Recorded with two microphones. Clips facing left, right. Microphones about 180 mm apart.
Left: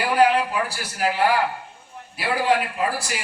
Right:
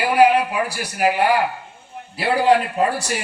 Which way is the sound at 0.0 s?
10° right (ahead or behind).